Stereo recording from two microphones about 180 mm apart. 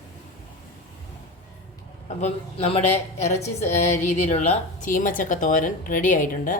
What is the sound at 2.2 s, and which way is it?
A woman's voice, 35° left (ahead or behind).